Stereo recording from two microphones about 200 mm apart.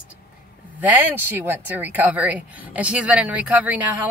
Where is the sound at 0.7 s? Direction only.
10° right (ahead or behind).